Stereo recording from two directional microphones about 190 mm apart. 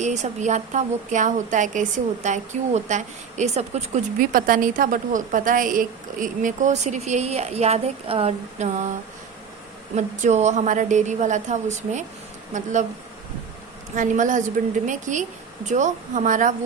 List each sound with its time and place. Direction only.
0.0 s a woman's voice: 40° right (ahead or behind)
9.9 s a woman's voice: 40° right (ahead or behind)
13.9 s a woman's voice: 40° right (ahead or behind)